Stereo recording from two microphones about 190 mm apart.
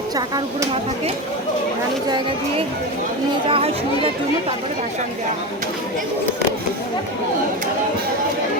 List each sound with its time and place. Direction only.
2.0 s speech: 25° right (ahead or behind)